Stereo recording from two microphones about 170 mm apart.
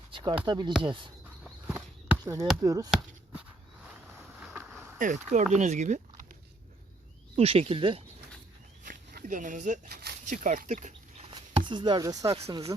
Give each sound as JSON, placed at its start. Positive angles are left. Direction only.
{"t": 0.1, "sound": "speech", "side_deg": -30}
{"t": 1.6, "sound": "a sound", "side_deg": -10}
{"t": 2.6, "sound": "speech", "side_deg": -20}
{"t": 4.4, "sound": "vehicle", "side_deg": -5}
{"t": 4.9, "sound": "speech", "side_deg": -50}
{"t": 7.3, "sound": "speech", "side_deg": -35}
{"t": 8.8, "sound": "a sound", "side_deg": -50}
{"t": 9.9, "sound": "a sound", "side_deg": -70}
{"t": 10.2, "sound": "speech", "side_deg": -50}
{"t": 11.3, "sound": "chopping", "side_deg": -30}
{"t": 12.3, "sound": "speech", "side_deg": -35}